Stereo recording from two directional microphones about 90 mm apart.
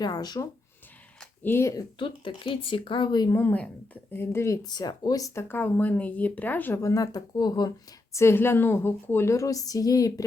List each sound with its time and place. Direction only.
0.0 s speech: 45° left (ahead or behind)
1.5 s speech: 25° left (ahead or behind)
2.0 s speech: 70° left (ahead or behind); by 3.3 s 50° left (ahead or behind)
3.3 s speech: 20° left (ahead or behind)
4.6 s speech: 50° left (ahead or behind); by 6.7 s 20° left (ahead or behind)
6.8 s speech: 40° left (ahead or behind)
8.1 s speech: 30° left (ahead or behind)